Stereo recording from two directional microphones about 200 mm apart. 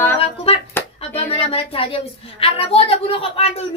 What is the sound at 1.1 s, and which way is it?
A woman's voice, 30° left (ahead or behind).